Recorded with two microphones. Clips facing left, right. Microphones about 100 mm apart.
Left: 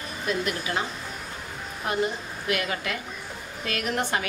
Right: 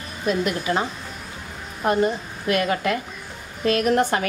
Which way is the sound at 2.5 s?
40° right (ahead or behind).